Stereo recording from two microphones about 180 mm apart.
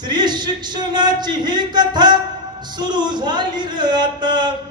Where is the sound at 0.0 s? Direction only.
25° right (ahead or behind).